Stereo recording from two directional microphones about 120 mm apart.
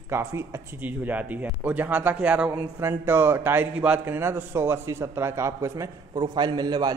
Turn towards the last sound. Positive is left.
turn(degrees=-35)  # may be behind; listen again after turning